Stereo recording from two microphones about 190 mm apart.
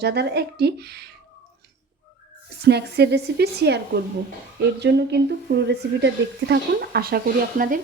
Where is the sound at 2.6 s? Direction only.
60° right (ahead or behind).